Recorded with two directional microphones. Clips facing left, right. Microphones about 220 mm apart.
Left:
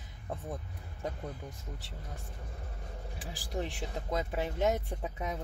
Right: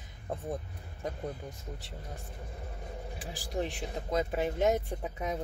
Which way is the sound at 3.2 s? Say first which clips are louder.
Right 2 dB; 20° right (ahead or behind).